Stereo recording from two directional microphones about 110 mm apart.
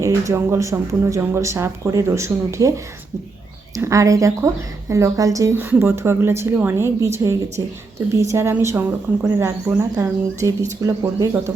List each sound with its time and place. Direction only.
0.0 s speech: 25° right (ahead or behind)
10.0 s speech: 25° right (ahead or behind)